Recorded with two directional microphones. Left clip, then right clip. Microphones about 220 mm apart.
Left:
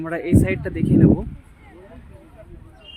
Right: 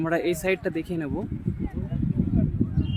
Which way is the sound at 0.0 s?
10° right (ahead or behind).